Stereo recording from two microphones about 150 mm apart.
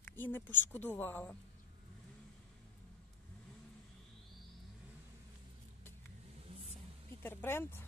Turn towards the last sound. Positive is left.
turn(degrees=15)  # may be behind; listen again after turning